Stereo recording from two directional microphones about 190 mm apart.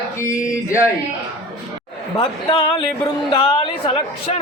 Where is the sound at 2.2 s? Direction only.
30° left (ahead or behind).